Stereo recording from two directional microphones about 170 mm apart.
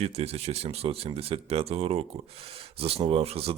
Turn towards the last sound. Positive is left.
turn(degrees=-35)  # may be behind; listen again after turning